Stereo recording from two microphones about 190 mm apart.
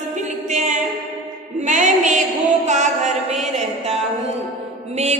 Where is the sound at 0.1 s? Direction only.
40° right (ahead or behind).